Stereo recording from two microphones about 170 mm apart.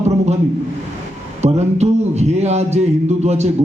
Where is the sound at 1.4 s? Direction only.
40° right (ahead or behind).